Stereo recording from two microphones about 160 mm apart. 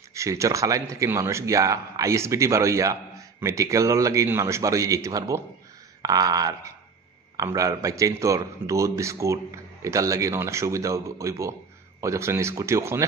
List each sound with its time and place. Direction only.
0.1 s speech: 20° right (ahead or behind)